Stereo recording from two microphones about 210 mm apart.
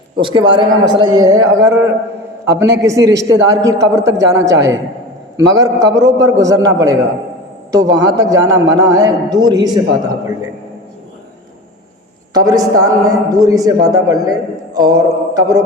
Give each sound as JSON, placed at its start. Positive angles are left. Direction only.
{"t": 0.2, "sound": "a man's voice", "side_deg": -20}
{"t": 12.3, "sound": "a man's voice", "side_deg": -20}